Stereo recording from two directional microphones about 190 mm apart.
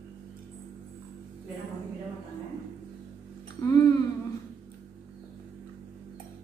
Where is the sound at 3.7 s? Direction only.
20° left (ahead or behind).